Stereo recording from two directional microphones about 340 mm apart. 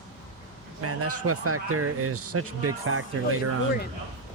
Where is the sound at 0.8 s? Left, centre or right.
Right.